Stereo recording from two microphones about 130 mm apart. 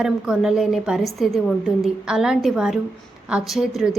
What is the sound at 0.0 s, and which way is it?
A woman's voice, 5° right (ahead or behind).